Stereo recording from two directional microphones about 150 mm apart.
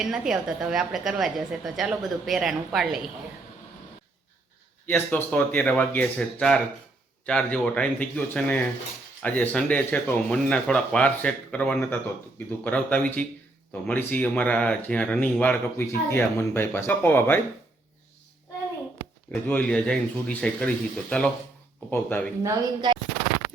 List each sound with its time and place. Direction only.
0.0 s a woman's voice: 5° right (ahead or behind)
4.9 s speech: 10° left (ahead or behind)
19.3 s speech: 10° left (ahead or behind)
22.4 s speech: 30° right (ahead or behind)